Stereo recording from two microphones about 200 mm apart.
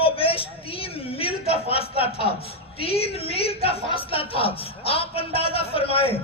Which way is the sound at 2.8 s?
30° left (ahead or behind).